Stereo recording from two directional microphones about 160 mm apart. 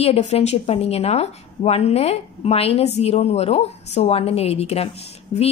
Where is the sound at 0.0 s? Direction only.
40° left (ahead or behind).